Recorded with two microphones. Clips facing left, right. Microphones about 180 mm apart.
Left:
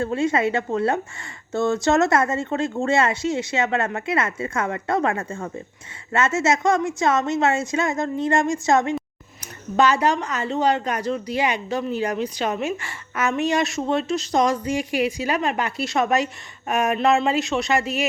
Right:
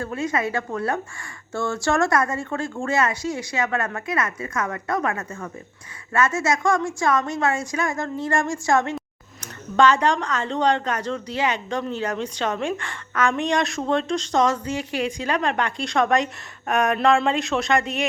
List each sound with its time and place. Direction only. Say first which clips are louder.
0.0 s speech: left 4 dB; 25° left (ahead or behind)
9.0 s speech: left 3 dB; 10° left (ahead or behind)